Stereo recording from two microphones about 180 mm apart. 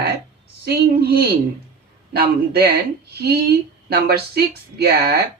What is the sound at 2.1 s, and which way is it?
Speech, 60° right (ahead or behind).